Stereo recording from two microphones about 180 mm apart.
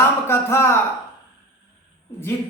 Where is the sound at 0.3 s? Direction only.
15° left (ahead or behind).